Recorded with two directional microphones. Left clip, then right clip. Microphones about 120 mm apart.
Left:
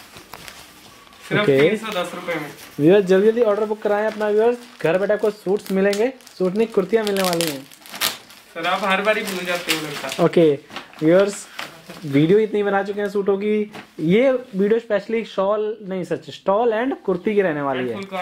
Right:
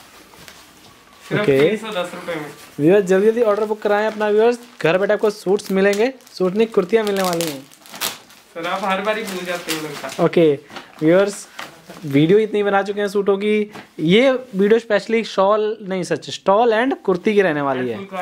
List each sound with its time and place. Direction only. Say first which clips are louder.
1.3 s speech: right 1 dB; 5° right (ahead or behind)
3.5 s speech: right 2 dB; 20° right (ahead or behind)
4.2 s speech: right 2 dB; 35° right (ahead or behind); by 7.1 s 15° right (ahead or behind)
7.1 s speech: right 1 dB; 5° right (ahead or behind); by 14.4 s 30° right (ahead or behind)
14.6 s speech: right 6 dB; 40° right (ahead or behind)